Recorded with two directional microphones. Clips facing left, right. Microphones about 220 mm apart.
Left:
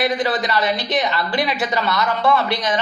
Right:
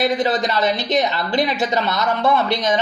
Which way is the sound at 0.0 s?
20° right (ahead or behind).